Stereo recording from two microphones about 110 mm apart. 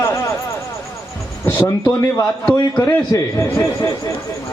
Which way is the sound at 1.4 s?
25° left (ahead or behind).